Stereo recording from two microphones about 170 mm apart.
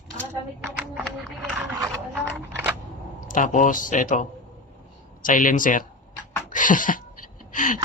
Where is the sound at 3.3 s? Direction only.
50° left (ahead or behind).